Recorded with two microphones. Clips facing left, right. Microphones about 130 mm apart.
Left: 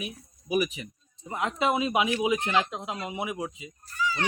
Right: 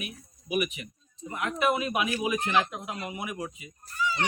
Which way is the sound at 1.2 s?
25° left (ahead or behind).